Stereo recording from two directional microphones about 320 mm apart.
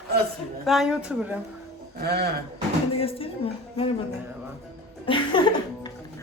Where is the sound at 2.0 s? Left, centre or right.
Right.